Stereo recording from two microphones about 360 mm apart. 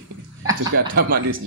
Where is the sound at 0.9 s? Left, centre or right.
Right.